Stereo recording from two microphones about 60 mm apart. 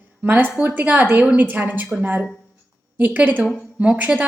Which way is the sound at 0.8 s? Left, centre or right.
Right.